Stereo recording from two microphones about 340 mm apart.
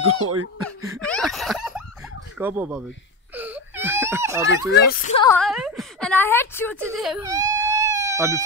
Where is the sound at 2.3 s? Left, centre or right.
Centre.